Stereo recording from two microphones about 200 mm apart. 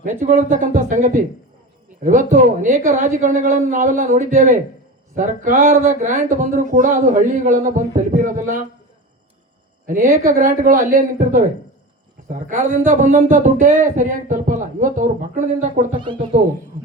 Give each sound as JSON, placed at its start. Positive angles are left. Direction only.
{"t": 0.0, "sound": "speech", "side_deg": -40}
{"t": 9.8, "sound": "a woman's voice", "side_deg": -45}